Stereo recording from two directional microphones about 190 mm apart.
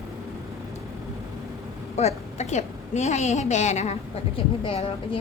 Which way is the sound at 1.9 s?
35° left (ahead or behind).